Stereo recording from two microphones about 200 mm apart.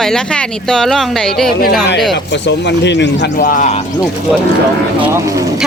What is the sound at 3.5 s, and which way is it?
Speech, 40° left (ahead or behind).